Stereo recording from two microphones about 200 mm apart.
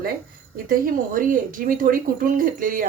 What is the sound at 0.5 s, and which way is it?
Speech, 45° right (ahead or behind).